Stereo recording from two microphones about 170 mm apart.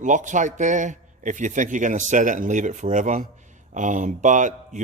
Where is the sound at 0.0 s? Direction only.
45° right (ahead or behind).